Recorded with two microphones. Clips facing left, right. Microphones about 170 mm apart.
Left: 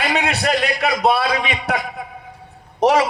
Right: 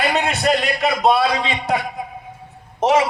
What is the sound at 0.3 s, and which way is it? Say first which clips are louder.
A man's voice: right 1 dB; 65° left (ahead or behind).